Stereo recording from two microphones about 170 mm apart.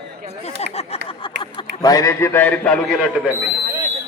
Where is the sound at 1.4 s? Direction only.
30° left (ahead or behind); by 2.8 s 10° left (ahead or behind).